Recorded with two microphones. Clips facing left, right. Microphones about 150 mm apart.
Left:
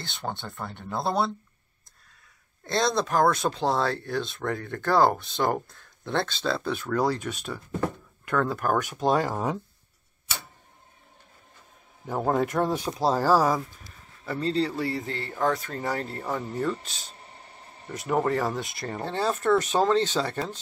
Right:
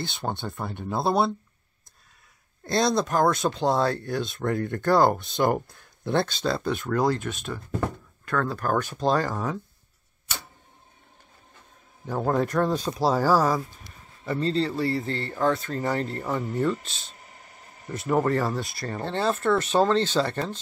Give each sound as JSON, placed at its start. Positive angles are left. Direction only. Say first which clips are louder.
{"t": 0.4, "sound": "speech", "louder": "right 4 dB", "side_deg": -15}
{"t": 2.7, "sound": "speech", "louder": "right 2 dB", "side_deg": 0}
{"t": 12.1, "sound": "speech", "louder": "even", "side_deg": 10}
{"t": 13.0, "sound": "speech", "louder": "even", "side_deg": 0}
{"t": 17.2, "sound": "a sound", "louder": "left 2 dB", "side_deg": 30}
{"t": 17.9, "sound": "speech", "louder": "right 2 dB", "side_deg": 10}